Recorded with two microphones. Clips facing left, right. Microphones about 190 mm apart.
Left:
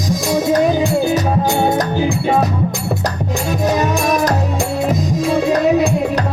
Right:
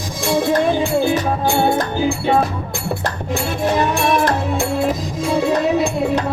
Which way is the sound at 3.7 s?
40° left (ahead or behind).